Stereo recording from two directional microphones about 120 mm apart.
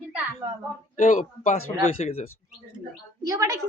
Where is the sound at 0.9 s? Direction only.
90° left.